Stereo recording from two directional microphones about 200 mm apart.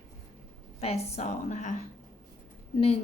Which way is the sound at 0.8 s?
30° left (ahead or behind).